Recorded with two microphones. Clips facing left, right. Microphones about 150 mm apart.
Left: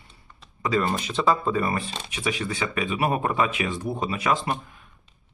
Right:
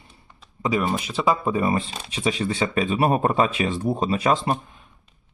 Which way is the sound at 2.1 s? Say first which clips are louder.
Right 5 dB; 30° right (ahead or behind).